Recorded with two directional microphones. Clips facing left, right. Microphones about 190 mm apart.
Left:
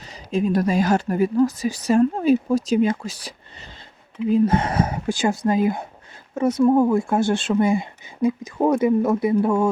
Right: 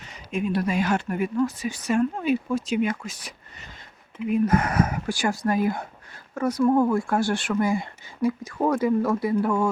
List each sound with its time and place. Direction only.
0.0 s speech: 35° left (ahead or behind)